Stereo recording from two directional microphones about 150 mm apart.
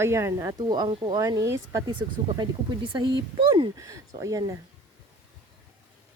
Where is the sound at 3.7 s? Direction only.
25° right (ahead or behind).